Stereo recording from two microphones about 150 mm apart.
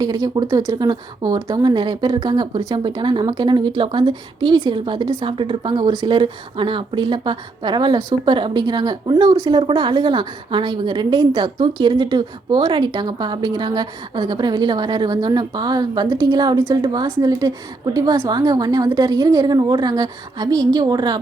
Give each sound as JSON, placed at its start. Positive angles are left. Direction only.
{"t": 0.0, "sound": "speech", "side_deg": -25}